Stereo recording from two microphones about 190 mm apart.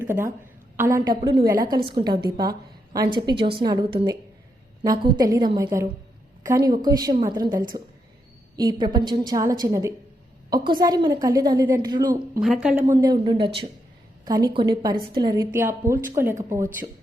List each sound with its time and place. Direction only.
0.0 s a woman's voice: 10° right (ahead or behind)
12.4 s a woman's voice: 5° right (ahead or behind)